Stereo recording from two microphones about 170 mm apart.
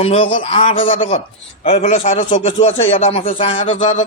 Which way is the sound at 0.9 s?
45° left (ahead or behind).